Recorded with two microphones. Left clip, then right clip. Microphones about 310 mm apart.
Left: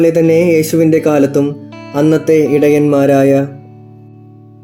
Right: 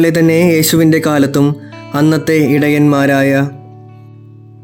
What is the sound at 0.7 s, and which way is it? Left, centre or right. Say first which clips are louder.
Speech: left 1 dB; right.